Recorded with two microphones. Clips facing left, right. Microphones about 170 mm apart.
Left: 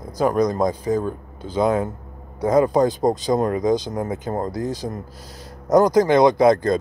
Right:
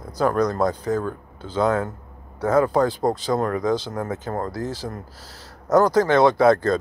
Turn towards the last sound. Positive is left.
turn(degrees=15)  # may be behind; listen again after turning